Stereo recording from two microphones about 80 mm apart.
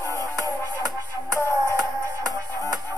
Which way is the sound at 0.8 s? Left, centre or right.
Right.